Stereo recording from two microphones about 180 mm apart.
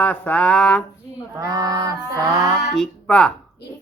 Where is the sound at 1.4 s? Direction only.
20° right (ahead or behind).